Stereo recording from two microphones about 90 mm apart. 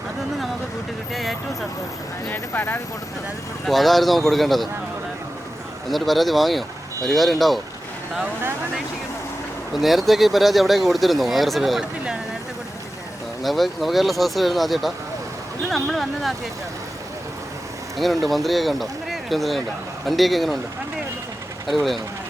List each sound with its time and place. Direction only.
1.1 s speech: centre (ahead or behind)
2.3 s speech: 25° left (ahead or behind)
3.7 s speech: centre (ahead or behind)
5.9 s speech: centre (ahead or behind)
9.8 s speech: centre (ahead or behind)
13.4 s speech: centre (ahead or behind)
17.9 s speech: centre (ahead or behind)